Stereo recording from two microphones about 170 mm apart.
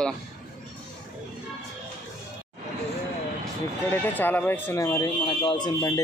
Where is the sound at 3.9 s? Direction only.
10° left (ahead or behind).